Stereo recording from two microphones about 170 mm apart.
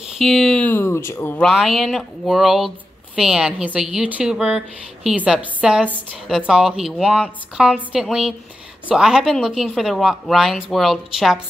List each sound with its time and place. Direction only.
0.2 s speech: centre (ahead or behind)
1.5 s a woman's voice: centre (ahead or behind)